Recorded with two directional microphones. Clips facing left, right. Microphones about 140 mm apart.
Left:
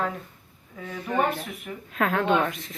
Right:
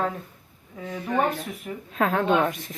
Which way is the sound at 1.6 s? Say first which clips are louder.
Right 2 dB; 30° right (ahead or behind).